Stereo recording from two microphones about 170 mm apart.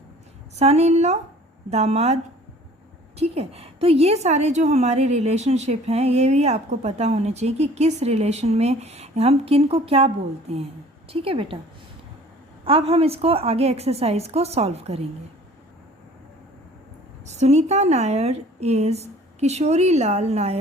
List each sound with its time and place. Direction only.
0.6 s a woman's voice: 40° right (ahead or behind)
3.2 s a woman's voice: 35° right (ahead or behind)
12.6 s a woman's voice: 35° right (ahead or behind)
17.2 s a woman's voice: 40° right (ahead or behind)